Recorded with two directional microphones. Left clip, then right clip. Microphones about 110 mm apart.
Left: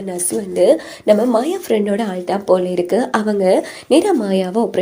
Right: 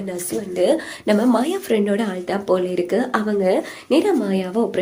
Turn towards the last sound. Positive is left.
turn(degrees=30)  # may be behind; listen again after turning